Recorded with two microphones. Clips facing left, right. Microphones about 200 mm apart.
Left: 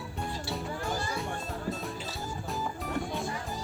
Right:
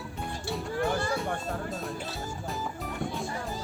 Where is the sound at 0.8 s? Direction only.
65° right (ahead or behind).